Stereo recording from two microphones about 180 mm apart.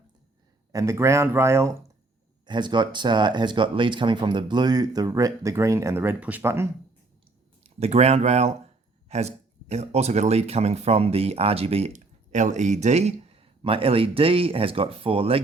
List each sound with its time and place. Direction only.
0.7 s speech: 15° right (ahead or behind)
2.5 s speech: 25° right (ahead or behind)
7.6 s speech: 35° right (ahead or behind)